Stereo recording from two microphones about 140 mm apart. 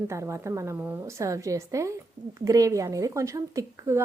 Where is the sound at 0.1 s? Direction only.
20° right (ahead or behind).